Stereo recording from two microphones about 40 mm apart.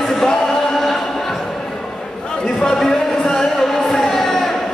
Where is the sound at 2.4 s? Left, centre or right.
Centre.